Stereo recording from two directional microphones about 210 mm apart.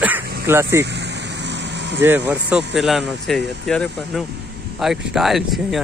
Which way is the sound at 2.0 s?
10° right (ahead or behind).